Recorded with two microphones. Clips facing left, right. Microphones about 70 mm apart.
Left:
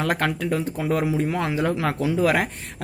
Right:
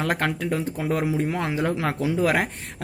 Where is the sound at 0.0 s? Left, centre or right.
Right.